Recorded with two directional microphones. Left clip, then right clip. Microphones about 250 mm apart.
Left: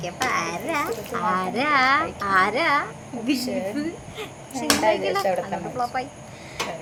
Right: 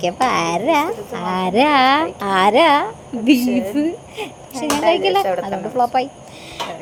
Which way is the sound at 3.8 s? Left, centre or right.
Centre.